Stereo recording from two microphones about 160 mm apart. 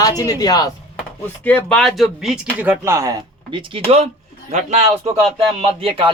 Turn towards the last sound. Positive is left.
turn(degrees=-35)  # may be behind; listen again after turning